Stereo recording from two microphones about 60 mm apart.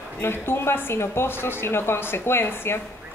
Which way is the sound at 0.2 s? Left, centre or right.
Left.